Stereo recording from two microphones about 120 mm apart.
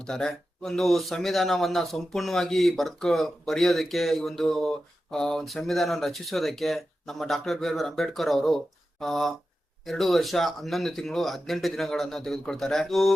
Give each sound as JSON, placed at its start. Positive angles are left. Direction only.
{"t": 0.0, "sound": "speech", "side_deg": 5}